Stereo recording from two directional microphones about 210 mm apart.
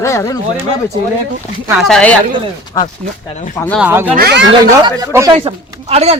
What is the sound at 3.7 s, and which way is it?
Speech, 5° right (ahead or behind).